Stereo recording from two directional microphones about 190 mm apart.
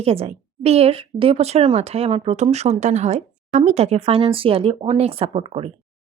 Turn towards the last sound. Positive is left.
turn(degrees=-30)  # may be behind; listen again after turning